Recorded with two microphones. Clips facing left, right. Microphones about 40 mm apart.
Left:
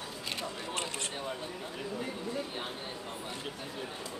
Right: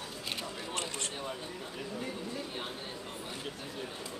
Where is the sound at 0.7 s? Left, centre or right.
Centre.